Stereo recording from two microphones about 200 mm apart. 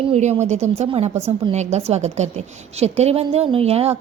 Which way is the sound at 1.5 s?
35° right (ahead or behind).